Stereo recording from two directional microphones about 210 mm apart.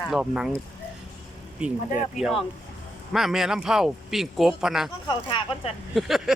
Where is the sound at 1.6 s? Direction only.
5° right (ahead or behind).